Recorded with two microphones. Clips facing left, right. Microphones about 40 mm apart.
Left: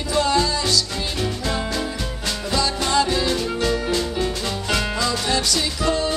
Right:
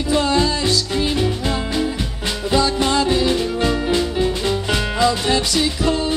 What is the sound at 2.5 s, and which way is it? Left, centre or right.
Music, right.